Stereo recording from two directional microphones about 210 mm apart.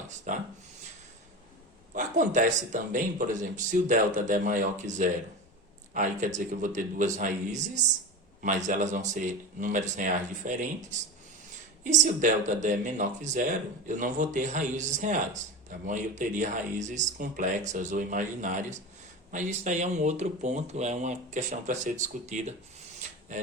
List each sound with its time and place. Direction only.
0.3 s speech: 40° right (ahead or behind)
1.9 s speech: 40° right (ahead or behind)